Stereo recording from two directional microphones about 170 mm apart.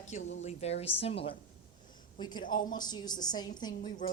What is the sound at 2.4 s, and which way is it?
Speech, 55° left (ahead or behind).